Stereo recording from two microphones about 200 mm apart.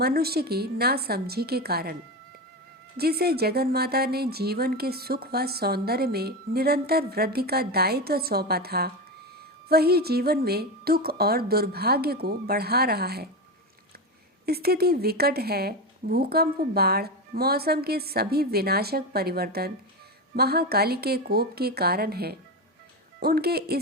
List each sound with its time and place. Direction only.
0.0 s speech: 50° right (ahead or behind)
3.0 s speech: 50° right (ahead or behind)
14.4 s speech: 50° right (ahead or behind)